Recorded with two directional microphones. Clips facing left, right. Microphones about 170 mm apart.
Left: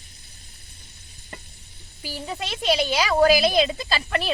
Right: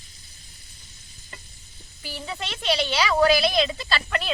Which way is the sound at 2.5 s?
10° left (ahead or behind).